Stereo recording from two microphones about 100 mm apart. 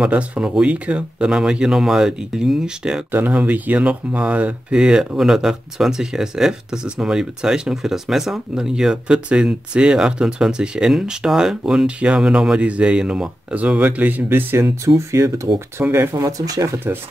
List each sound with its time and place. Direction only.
0.0 s speech: 10° right (ahead or behind); by 16.6 s 35° right (ahead or behind)